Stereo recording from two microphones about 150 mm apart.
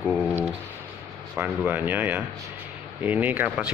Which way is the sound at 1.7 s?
15° right (ahead or behind).